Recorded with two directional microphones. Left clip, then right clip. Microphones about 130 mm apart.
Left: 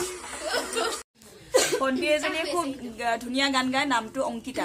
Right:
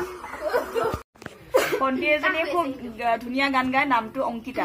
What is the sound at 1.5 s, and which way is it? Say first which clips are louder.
A woman's voice: right 2 dB; 25° left (ahead or behind).